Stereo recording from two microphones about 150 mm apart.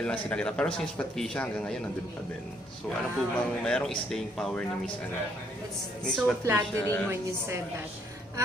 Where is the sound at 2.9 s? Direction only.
5° left (ahead or behind).